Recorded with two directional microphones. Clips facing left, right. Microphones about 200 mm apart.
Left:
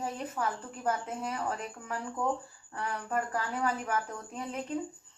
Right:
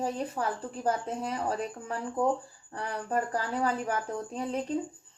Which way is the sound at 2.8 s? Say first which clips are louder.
Right 2 dB; 35° right (ahead or behind).